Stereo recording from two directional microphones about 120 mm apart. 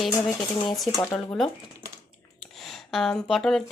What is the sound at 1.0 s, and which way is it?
Speech, 15° left (ahead or behind).